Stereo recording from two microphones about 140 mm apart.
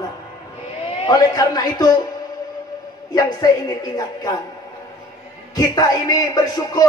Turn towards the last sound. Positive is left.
turn(degrees=25)  # may be behind; listen again after turning